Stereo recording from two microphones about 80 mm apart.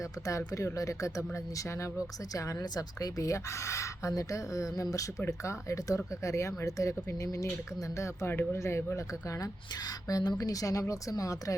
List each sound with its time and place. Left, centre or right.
0.0 s speech: left